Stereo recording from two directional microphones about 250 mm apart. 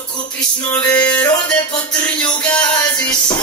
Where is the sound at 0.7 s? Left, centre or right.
Centre.